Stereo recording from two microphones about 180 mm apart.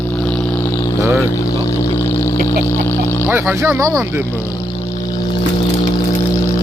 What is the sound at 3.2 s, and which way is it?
Speech, 10° right (ahead or behind).